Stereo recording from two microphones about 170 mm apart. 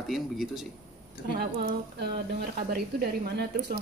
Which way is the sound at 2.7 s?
65° right (ahead or behind).